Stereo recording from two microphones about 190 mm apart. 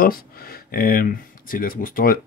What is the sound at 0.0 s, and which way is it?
Speech, 50° left (ahead or behind).